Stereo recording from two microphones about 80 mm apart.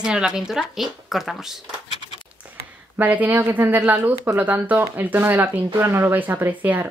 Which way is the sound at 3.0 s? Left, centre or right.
Centre.